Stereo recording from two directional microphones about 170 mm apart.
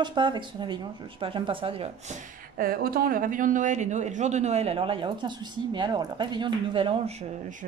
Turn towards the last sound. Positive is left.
turn(degrees=-30)  # may be behind; listen again after turning